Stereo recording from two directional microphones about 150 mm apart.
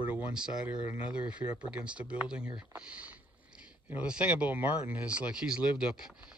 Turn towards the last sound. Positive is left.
turn(degrees=-5)  # may be behind; listen again after turning